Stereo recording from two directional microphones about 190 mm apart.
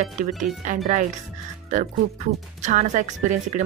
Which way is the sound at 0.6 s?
40° right (ahead or behind).